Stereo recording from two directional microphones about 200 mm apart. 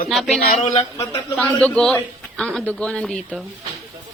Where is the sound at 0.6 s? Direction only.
20° left (ahead or behind).